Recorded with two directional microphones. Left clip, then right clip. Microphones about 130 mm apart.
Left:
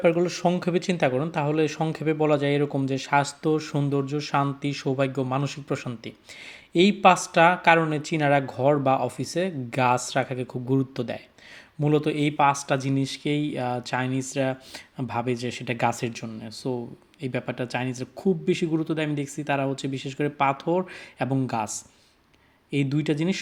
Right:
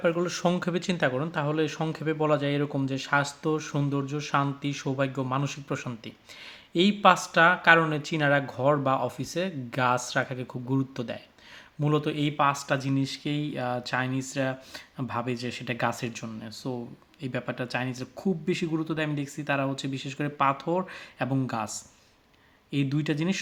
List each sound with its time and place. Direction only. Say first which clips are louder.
0.2 s speech: left 3 dB; 10° left (ahead or behind)
0.6 s speech: left 3 dB; 15° left (ahead or behind)